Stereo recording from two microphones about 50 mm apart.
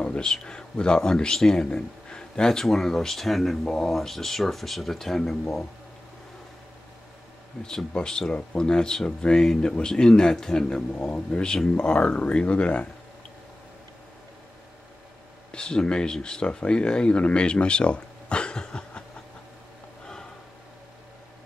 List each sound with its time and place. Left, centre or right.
0.0 s a man's voice: centre
7.6 s a man's voice: centre
15.5 s speech: centre